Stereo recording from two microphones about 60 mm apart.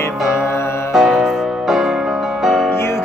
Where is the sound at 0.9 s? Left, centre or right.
Centre.